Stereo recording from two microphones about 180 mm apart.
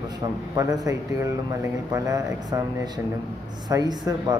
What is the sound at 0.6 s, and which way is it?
Speech, 20° right (ahead or behind).